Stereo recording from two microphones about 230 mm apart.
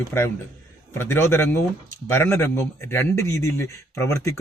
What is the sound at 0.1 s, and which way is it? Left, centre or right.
A man's voice, centre.